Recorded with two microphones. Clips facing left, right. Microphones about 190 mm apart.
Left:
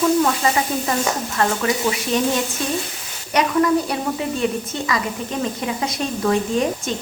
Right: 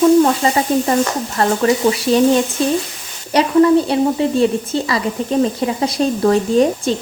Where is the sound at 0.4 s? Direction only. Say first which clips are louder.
Right 5 dB; 30° right (ahead or behind).